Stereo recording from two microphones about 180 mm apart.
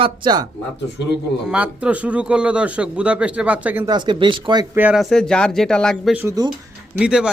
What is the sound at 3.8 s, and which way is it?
Speech, 25° right (ahead or behind).